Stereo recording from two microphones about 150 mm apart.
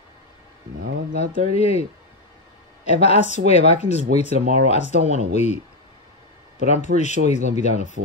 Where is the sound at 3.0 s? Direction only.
45° left (ahead or behind).